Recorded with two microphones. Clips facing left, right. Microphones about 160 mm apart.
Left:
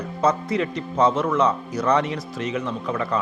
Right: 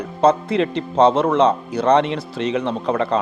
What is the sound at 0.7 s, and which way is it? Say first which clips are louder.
Speech: right 6 dB; 30° right (ahead or behind).